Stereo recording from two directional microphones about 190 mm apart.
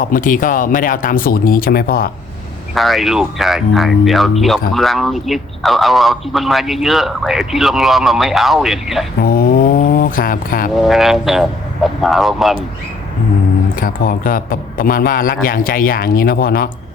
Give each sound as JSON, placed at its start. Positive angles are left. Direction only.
{"t": 0.0, "sound": "a man's voice", "side_deg": 45}
{"t": 2.7, "sound": "a man's voice", "side_deg": 0}
{"t": 9.2, "sound": "a man's voice", "side_deg": 50}
{"t": 10.8, "sound": "a man's voice", "side_deg": 0}
{"t": 13.7, "sound": "a man's voice", "side_deg": 50}